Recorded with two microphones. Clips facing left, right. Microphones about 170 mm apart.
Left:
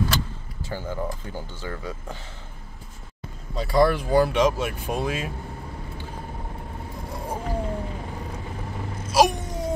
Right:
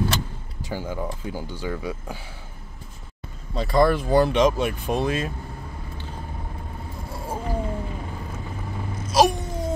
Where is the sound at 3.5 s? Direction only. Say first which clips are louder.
Right 1 dB; 5° left (ahead or behind).